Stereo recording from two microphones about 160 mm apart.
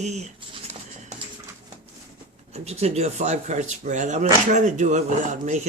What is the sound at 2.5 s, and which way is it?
Speech, 40° right (ahead or behind).